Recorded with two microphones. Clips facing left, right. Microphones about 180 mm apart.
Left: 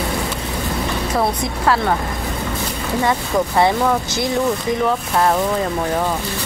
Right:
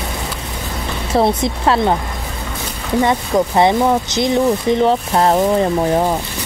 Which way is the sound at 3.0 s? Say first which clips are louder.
Right 4 dB; 20° right (ahead or behind).